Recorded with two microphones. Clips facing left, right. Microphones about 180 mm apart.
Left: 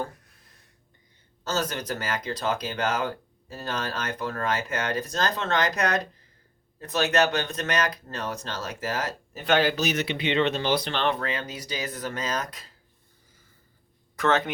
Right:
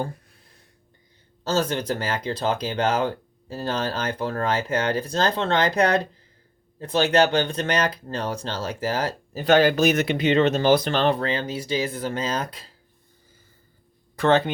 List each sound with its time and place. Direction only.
1.5 s speech: 30° right (ahead or behind)
14.2 s speech: 30° right (ahead or behind)